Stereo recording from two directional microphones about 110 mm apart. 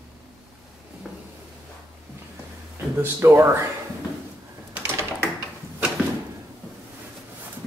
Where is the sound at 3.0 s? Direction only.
20° right (ahead or behind).